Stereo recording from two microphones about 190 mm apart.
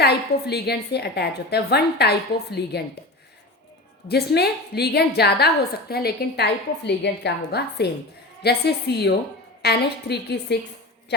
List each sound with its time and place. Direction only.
0.0 s a woman's voice: 60° left (ahead or behind)
4.1 s a woman's voice: 60° left (ahead or behind)